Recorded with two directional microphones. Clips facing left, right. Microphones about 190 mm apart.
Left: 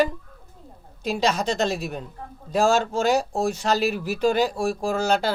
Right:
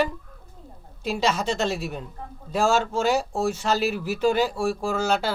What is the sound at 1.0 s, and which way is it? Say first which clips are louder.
A man's voice: left 1 dB; 40° left (ahead or behind).